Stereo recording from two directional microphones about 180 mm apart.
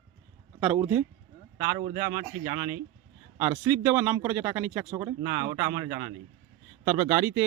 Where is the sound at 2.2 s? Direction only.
20° right (ahead or behind).